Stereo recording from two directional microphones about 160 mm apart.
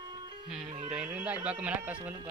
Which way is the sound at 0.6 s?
45° right (ahead or behind).